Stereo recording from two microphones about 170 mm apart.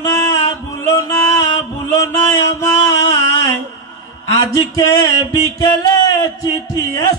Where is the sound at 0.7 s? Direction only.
15° left (ahead or behind).